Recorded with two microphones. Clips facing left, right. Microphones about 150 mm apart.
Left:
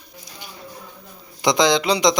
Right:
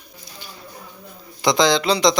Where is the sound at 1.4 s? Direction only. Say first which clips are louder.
Even; 20° left (ahead or behind).